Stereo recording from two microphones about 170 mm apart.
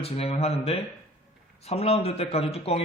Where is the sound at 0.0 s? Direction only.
35° left (ahead or behind).